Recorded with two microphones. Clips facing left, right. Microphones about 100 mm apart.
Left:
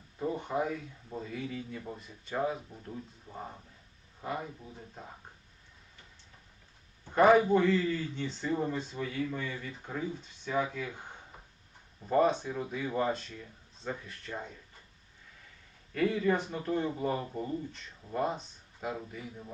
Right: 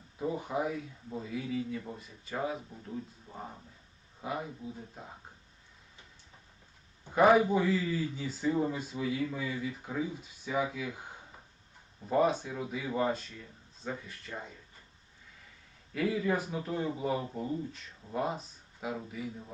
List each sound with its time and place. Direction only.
0.2 s speech: 5° right (ahead or behind)
7.0 s a man's voice: 5° right (ahead or behind)
12.0 s speech: centre (ahead or behind)
16.0 s speech: 5° right (ahead or behind)